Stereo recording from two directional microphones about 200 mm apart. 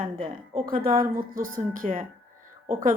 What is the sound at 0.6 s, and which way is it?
A woman's voice, 45° right (ahead or behind).